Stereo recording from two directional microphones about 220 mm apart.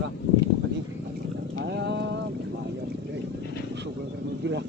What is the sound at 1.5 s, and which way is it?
Boat, 50° right (ahead or behind).